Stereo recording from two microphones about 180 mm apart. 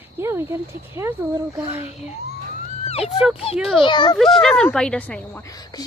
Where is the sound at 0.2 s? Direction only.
15° right (ahead or behind).